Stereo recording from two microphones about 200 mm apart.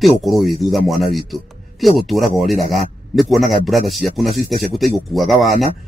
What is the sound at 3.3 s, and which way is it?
Speech, centre (ahead or behind).